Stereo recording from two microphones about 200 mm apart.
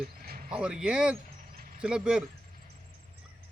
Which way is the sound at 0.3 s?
45° right (ahead or behind).